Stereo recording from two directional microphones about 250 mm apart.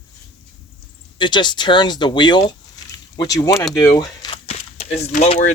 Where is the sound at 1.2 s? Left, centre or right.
Centre.